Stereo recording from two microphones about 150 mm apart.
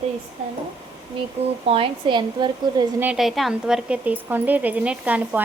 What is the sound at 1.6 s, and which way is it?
Speech, 40° right (ahead or behind).